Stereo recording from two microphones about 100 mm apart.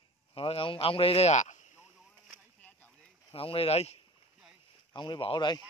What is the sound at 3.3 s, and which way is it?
Speech, 70° left (ahead or behind).